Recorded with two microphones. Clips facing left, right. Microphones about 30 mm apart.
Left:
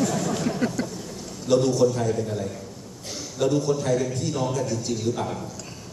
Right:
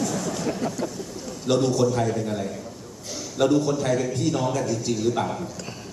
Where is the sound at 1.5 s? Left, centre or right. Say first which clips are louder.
Left 2 dB; right.